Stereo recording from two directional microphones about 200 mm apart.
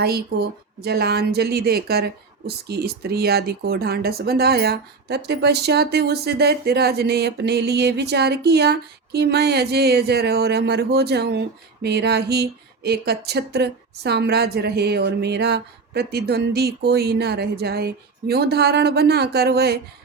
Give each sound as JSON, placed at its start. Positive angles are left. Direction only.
{"t": 0.0, "sound": "speech", "side_deg": -50}